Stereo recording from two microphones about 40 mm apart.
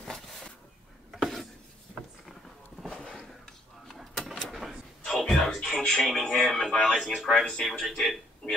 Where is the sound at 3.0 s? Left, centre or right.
Centre.